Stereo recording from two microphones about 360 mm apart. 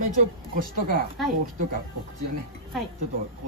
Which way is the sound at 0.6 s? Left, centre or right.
Right.